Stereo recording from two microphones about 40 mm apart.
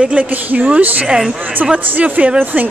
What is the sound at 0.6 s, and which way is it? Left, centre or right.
Speech, right.